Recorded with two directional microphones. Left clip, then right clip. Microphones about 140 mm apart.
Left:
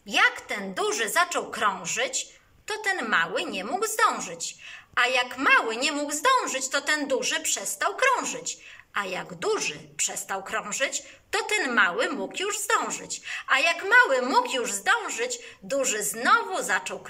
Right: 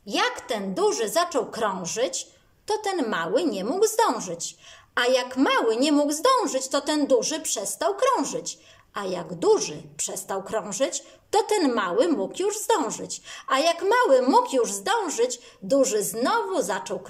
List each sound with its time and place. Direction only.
0.1 s a woman's voice: 30° right (ahead or behind)